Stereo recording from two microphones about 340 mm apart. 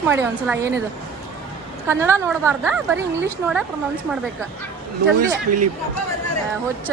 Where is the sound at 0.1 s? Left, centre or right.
Centre.